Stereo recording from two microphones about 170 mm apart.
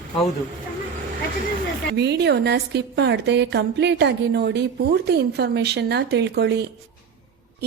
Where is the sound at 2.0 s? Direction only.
80° right.